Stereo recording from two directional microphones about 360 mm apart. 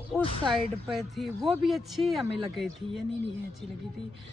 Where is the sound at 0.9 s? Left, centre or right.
Centre.